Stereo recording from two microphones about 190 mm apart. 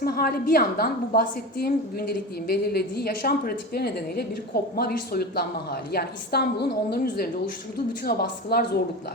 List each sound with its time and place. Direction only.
0.0 s a woman's voice: 55° left (ahead or behind)